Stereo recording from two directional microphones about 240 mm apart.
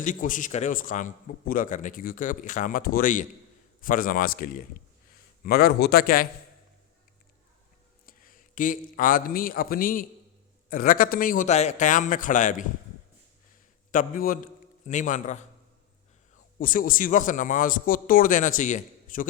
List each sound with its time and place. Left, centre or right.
0.0 s a man's voice: left
8.0 s a man's voice: left
13.9 s a man's voice: left
16.6 s a man's voice: left